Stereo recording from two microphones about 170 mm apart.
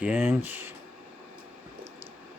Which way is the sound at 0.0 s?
10° right (ahead or behind).